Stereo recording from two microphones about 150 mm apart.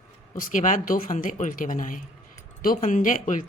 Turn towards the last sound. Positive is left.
turn(degrees=60)  # may be behind; listen again after turning